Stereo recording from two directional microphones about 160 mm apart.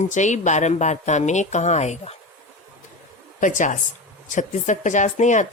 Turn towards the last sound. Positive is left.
turn(degrees=50)  # may be behind; listen again after turning